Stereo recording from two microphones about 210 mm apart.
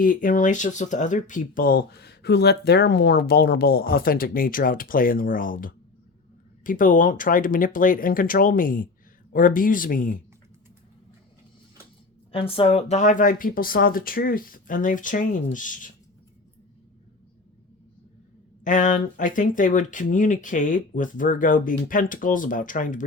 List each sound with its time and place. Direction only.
0.0 s speech: 40° left (ahead or behind)
12.3 s speech: 25° left (ahead or behind)
18.6 s speech: 35° left (ahead or behind)